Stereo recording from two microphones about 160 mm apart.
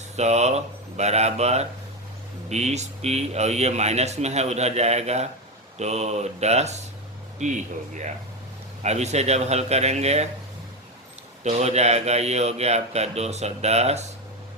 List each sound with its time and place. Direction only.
0.2 s speech: 45° right (ahead or behind)
11.4 s speech: 45° right (ahead or behind)